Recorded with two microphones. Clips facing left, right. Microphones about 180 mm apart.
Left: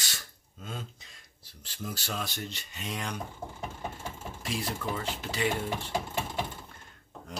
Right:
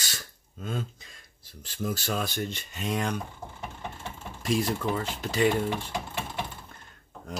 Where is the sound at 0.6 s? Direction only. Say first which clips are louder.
Right 7 dB; 55° right (ahead or behind).